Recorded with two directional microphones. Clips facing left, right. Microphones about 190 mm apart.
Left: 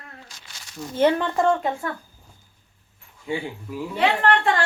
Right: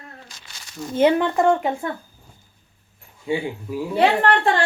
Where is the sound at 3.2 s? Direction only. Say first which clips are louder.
Right 4 dB; 15° right (ahead or behind).